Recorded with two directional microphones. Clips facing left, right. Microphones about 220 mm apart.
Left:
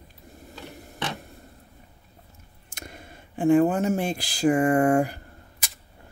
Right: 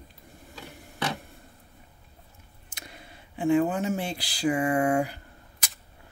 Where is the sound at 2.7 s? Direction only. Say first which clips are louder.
Left 5 dB; 50° left (ahead or behind).